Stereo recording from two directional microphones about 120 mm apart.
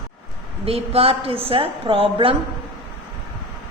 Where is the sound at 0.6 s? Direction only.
55° right (ahead or behind).